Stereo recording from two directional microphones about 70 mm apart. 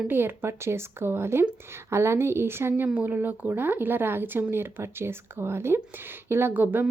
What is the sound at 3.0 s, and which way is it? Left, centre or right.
Speech, right.